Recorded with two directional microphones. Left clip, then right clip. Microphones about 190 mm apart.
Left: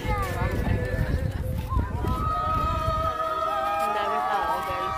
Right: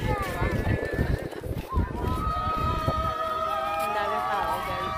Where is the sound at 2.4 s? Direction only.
60° left (ahead or behind).